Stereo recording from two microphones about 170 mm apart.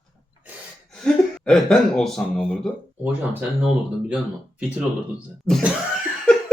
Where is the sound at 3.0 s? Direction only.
10° right (ahead or behind).